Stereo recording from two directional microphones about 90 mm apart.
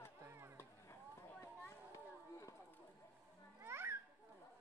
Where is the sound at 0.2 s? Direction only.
30° right (ahead or behind).